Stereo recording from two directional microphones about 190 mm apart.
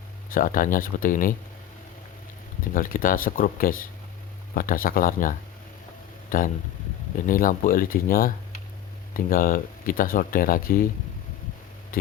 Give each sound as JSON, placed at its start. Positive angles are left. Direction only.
{"t": 0.3, "sound": "speech", "side_deg": 45}
{"t": 2.7, "sound": "speech", "side_deg": 45}
{"t": 6.3, "sound": "speech", "side_deg": 45}